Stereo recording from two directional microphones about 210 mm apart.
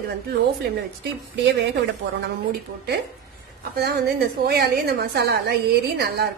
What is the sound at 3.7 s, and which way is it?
A woman's voice, 50° right (ahead or behind).